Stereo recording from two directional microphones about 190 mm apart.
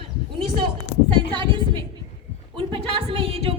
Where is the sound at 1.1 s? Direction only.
25° right (ahead or behind).